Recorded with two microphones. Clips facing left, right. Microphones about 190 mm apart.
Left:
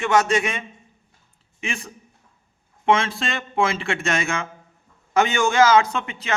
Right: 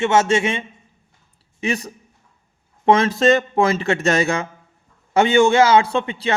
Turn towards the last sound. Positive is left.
turn(degrees=-30)  # may be behind; listen again after turning